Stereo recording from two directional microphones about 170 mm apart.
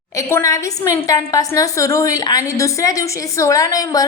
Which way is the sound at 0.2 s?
15° left (ahead or behind).